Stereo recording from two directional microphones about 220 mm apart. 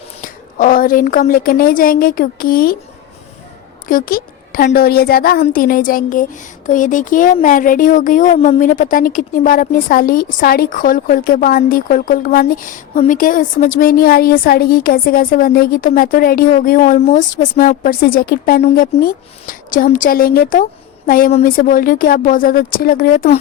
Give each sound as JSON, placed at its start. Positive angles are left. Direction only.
{"t": 0.2, "sound": "a woman's voice", "side_deg": 40}
{"t": 3.8, "sound": "speech", "side_deg": 40}